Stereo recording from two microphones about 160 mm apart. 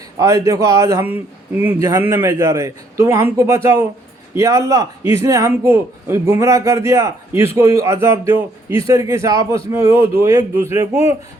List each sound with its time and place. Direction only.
0.2 s a man's voice: 20° right (ahead or behind)
1.0 s a man's voice: 10° right (ahead or behind)